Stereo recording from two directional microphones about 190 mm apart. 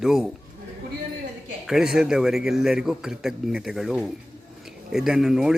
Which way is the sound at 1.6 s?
5° right (ahead or behind).